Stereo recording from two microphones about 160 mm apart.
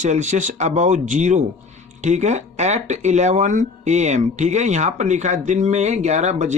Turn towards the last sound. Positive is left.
turn(degrees=-45)  # may be behind; listen again after turning